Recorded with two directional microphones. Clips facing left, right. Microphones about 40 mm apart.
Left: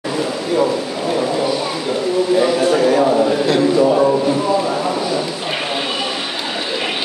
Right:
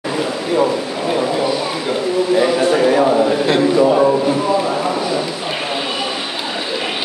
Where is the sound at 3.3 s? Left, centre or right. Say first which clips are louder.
Even; right.